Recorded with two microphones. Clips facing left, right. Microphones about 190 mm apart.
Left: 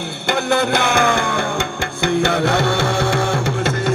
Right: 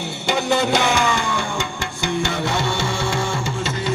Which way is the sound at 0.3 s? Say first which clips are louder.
Left 1 dB; 55° left (ahead or behind).